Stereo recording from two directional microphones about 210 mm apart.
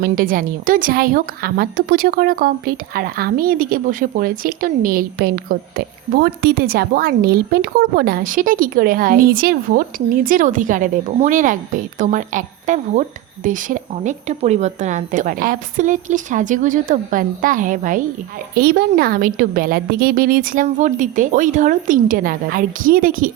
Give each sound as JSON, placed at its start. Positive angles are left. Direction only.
{"t": 0.0, "sound": "a woman's voice", "side_deg": -40}